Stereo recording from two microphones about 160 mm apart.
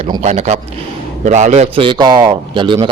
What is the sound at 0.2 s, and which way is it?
A man's voice, 45° right (ahead or behind).